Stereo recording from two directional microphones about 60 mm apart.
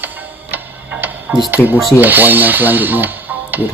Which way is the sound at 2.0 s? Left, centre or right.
Right.